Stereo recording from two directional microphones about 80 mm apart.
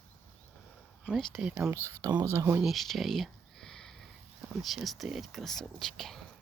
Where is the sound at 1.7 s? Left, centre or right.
Right.